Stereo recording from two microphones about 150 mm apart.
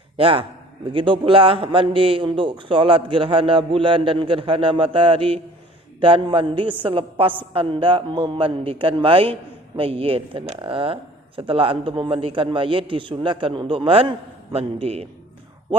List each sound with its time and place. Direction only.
0.2 s a man's voice: 35° right (ahead or behind)